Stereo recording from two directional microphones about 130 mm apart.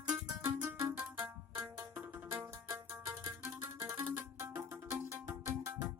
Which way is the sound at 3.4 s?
15° right (ahead or behind).